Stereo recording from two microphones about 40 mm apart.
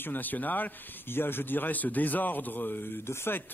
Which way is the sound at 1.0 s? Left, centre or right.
Left.